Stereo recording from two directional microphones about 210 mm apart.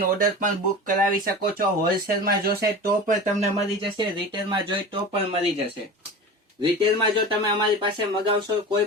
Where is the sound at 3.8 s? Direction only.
25° right (ahead or behind).